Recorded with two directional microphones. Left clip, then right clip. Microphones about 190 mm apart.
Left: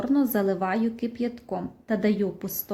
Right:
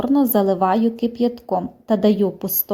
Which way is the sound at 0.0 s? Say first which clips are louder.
Right 7 dB; 20° right (ahead or behind).